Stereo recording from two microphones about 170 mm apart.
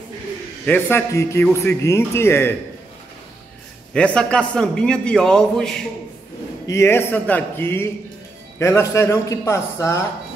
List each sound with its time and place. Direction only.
0.7 s a man's voice: 10° left (ahead or behind)
3.9 s a man's voice: 5° left (ahead or behind)
6.7 s a man's voice: 15° left (ahead or behind)